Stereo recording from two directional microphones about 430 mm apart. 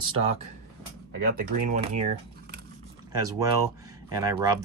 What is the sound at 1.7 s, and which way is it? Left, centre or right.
Speech, centre.